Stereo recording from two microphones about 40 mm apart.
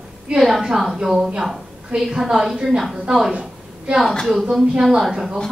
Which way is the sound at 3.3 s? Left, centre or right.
Right.